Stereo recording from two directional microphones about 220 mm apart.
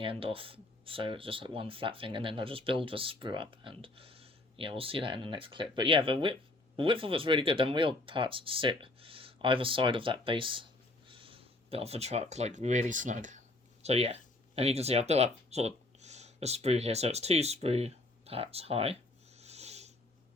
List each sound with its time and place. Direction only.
0.0 s speech: 25° right (ahead or behind)